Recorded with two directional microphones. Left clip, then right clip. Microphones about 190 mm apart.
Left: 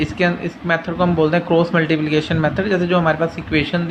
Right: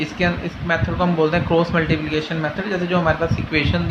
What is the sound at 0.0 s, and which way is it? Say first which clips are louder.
Speech: left 3 dB; 25° left (ahead or behind).